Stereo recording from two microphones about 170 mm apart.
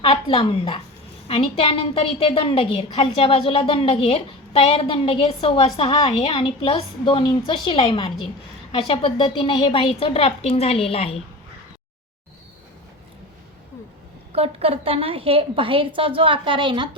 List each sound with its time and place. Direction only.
0.0 s a woman's voice: 35° left (ahead or behind)
14.3 s a woman's voice: 35° right (ahead or behind)